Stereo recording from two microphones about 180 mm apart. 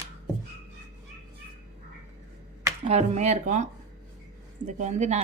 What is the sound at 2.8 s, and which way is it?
A woman's voice, 35° right (ahead or behind).